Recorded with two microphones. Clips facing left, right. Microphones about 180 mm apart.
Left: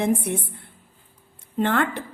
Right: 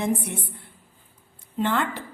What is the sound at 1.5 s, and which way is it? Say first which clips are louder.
Speech: left 3 dB; 55° left (ahead or behind).